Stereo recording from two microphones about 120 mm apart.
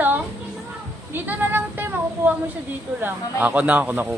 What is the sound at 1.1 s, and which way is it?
Speech, 15° right (ahead or behind).